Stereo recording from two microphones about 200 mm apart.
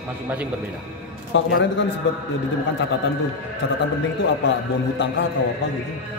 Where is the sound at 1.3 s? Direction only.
65° left (ahead or behind).